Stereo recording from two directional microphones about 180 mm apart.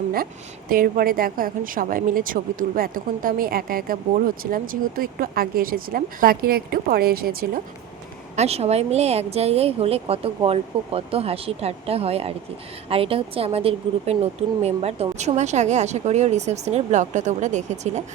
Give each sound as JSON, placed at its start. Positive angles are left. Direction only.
{"t": 0.7, "sound": "a woman's voice", "side_deg": -55}
{"t": 8.4, "sound": "speech", "side_deg": -35}